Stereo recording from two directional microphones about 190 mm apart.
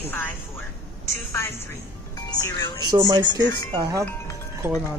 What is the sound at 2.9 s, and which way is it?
Speech, 20° right (ahead or behind).